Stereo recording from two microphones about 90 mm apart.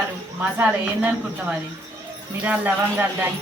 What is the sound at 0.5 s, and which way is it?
A woman's voice, 15° right (ahead or behind).